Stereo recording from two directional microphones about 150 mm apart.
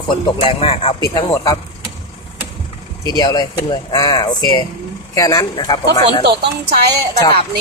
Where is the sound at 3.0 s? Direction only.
25° left (ahead or behind).